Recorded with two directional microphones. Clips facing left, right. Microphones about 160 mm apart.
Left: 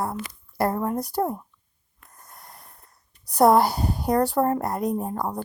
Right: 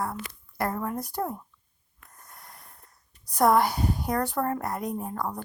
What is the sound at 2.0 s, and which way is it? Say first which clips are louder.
Snort: left 2 dB; 35° left (ahead or behind).